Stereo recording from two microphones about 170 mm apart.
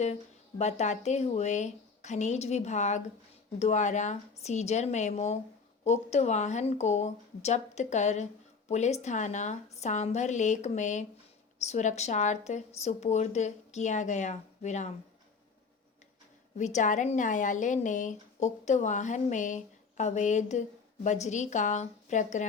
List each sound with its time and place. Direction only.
0.6 s speech: 40° left (ahead or behind)
16.6 s speech: 45° left (ahead or behind)